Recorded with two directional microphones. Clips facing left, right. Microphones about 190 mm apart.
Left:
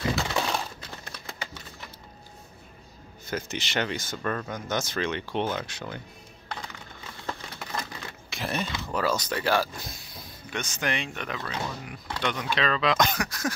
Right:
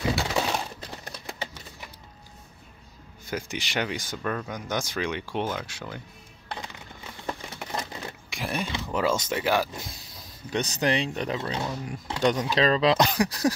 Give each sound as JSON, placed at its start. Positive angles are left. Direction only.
{"t": 0.2, "sound": "coin", "side_deg": -10}
{"t": 3.3, "sound": "speech", "side_deg": -10}
{"t": 7.2, "sound": "a sound", "side_deg": -15}
{"t": 8.8, "sound": "speech", "side_deg": -20}
{"t": 10.5, "sound": "speech", "side_deg": -35}
{"t": 12.2, "sound": "speech", "side_deg": -40}